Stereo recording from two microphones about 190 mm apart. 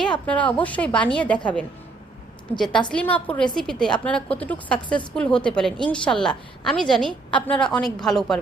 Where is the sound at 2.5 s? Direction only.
Centre (ahead or behind).